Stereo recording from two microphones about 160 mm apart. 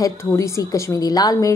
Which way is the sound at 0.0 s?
20° left (ahead or behind).